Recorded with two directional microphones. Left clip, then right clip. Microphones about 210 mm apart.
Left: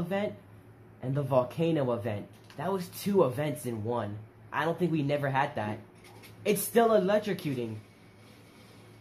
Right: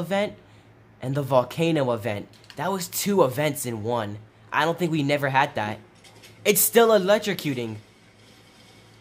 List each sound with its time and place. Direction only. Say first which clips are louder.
0.1 s speech: right 8 dB; 35° right (ahead or behind)